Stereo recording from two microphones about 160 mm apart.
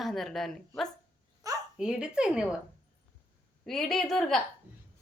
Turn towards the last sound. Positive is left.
turn(degrees=0)  # may be behind; listen again after turning